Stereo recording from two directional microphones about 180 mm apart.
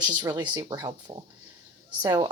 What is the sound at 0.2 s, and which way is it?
Speech, 25° right (ahead or behind).